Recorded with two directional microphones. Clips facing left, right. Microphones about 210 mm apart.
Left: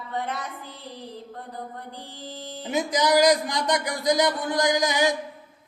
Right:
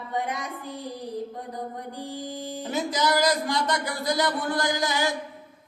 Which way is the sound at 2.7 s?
15° left (ahead or behind).